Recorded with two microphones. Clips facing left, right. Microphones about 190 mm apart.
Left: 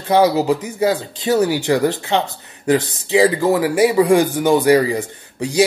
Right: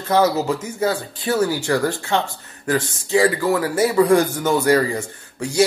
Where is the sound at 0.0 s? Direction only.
15° left (ahead or behind).